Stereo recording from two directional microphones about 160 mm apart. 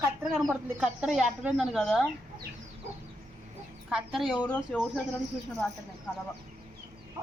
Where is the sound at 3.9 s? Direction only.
Centre (ahead or behind).